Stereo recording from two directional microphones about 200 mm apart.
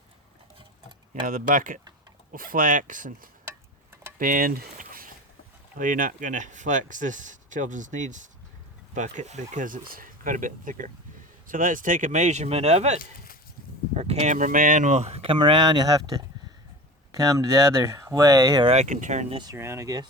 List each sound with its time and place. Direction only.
1.3 s speech: 40° right (ahead or behind); by 16.0 s 20° right (ahead or behind)
17.1 s speech: 15° right (ahead or behind)
18.7 s speech: 35° right (ahead or behind)
19.4 s speech: 15° right (ahead or behind)